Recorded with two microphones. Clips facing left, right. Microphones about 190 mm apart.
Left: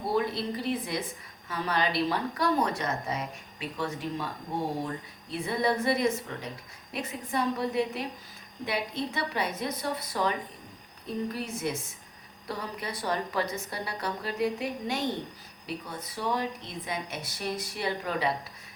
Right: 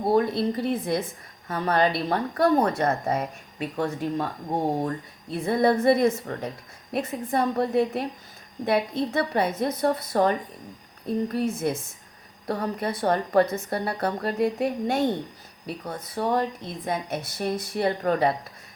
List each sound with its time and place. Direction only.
0.0 s a woman's voice: 50° right (ahead or behind)
5.3 s a woman's voice: 50° right (ahead or behind)